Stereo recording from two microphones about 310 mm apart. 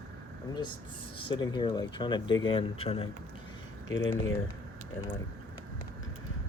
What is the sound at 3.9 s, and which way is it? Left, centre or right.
Speech, left.